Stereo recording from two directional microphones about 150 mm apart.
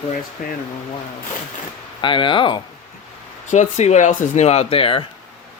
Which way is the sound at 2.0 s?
35° left (ahead or behind).